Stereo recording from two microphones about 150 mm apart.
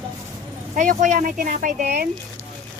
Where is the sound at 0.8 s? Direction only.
55° right (ahead or behind).